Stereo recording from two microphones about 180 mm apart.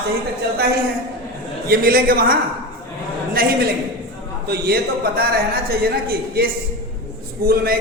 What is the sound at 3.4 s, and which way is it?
A man's voice, 55° right (ahead or behind).